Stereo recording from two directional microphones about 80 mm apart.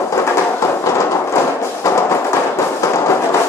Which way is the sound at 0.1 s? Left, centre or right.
Left.